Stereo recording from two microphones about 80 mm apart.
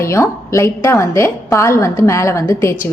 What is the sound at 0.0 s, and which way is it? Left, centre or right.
A woman's voice, left.